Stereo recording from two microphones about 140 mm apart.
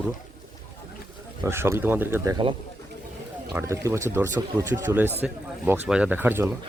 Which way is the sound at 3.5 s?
20° right (ahead or behind).